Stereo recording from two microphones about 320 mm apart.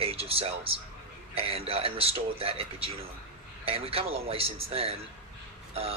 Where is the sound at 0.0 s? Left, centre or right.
Centre.